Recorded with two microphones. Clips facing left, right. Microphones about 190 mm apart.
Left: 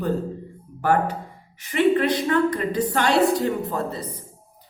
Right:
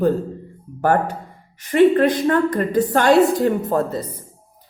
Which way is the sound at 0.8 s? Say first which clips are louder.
Right 3 dB; 45° right (ahead or behind).